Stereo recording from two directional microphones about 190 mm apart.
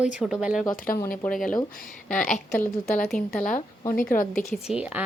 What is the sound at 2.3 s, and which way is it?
Speech, 45° left (ahead or behind).